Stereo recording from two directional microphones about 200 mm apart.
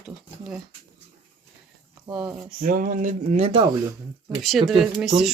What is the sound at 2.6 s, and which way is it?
Speech, 45° right (ahead or behind).